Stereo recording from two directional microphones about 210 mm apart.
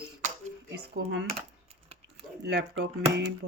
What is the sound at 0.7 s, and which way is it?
Speech, 60° right (ahead or behind).